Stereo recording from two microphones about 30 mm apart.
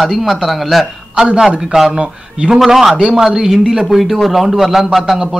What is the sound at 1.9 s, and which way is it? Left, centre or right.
Speech, right.